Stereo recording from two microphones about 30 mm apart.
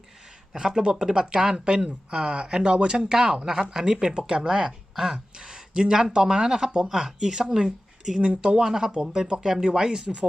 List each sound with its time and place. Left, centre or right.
0.8 s speech: right
8.3 s speech: right
8.5 s speech: right
9.2 s speech: right